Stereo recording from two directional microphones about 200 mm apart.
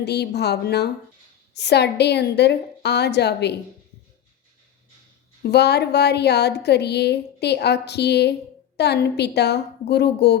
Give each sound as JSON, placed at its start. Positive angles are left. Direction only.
{"t": 0.0, "sound": "a woman's voice", "side_deg": 55}
{"t": 5.4, "sound": "a woman's voice", "side_deg": 55}